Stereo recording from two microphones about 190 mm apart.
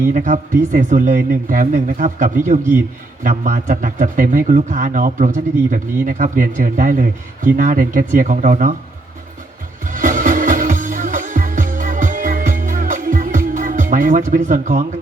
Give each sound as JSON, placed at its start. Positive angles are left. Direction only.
{"t": 0.1, "sound": "a man's voice", "side_deg": -45}
{"t": 9.8, "sound": "music", "side_deg": -45}